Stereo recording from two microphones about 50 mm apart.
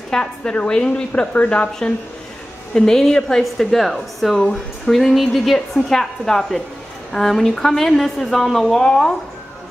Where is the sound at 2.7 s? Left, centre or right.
Centre.